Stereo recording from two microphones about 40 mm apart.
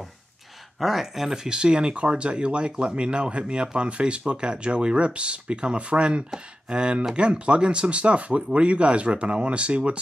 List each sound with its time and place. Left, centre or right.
0.7 s speech: centre
1.3 s speech: centre